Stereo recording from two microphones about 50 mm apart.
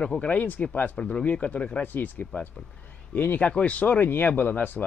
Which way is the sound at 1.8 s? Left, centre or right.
Left.